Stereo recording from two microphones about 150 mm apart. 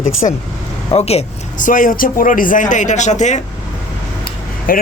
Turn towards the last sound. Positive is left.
turn(degrees=70)  # may be behind; listen again after turning